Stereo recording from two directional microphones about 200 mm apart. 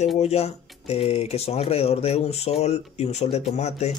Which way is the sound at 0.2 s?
30° left (ahead or behind).